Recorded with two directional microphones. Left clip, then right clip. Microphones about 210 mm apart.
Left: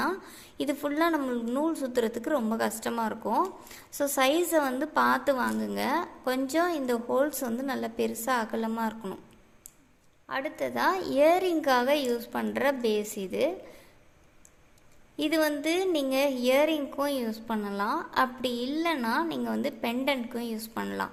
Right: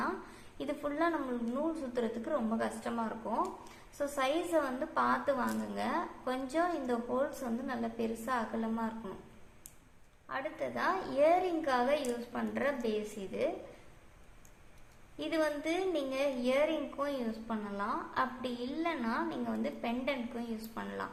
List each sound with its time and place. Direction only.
0.6 s a woman's voice: 55° left (ahead or behind)
10.2 s a woman's voice: 50° left (ahead or behind)
15.2 s a woman's voice: 50° left (ahead or behind)